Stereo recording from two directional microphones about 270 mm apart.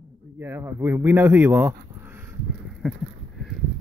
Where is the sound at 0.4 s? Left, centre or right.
Centre.